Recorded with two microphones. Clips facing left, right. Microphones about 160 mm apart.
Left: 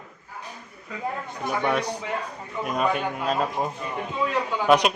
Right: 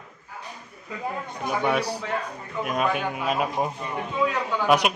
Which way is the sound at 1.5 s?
5° right (ahead or behind).